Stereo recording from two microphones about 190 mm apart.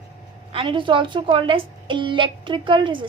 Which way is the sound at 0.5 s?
25° right (ahead or behind).